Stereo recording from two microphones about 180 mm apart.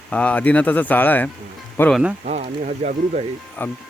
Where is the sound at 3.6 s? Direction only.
10° left (ahead or behind).